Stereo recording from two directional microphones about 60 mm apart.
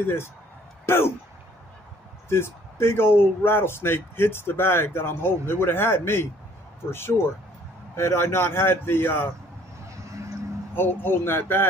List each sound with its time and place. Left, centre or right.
0.0 s speech: left
2.2 s speech: left
9.8 s vehicle: right
10.7 s speech: left